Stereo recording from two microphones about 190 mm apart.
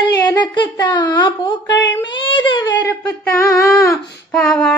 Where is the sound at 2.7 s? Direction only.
10° left (ahead or behind).